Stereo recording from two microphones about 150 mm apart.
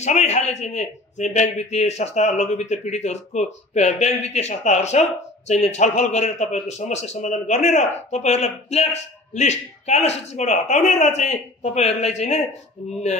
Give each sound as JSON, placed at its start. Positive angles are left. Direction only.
{"t": 0.0, "sound": "a man's voice", "side_deg": 50}